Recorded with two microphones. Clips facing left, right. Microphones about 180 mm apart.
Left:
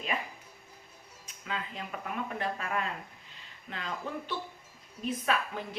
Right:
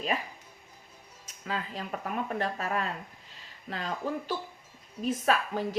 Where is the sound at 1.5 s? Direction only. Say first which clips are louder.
Right 3 dB; 35° right (ahead or behind).